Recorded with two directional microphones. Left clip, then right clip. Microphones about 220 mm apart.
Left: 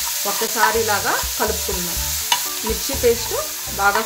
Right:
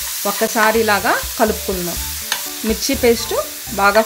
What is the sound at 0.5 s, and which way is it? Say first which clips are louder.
Speech: right 3 dB; 40° right (ahead or behind).